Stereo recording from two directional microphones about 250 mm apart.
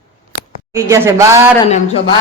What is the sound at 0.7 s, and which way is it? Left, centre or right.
Speech, centre.